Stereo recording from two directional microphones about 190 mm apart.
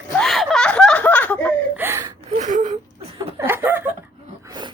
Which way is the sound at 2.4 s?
40° right (ahead or behind).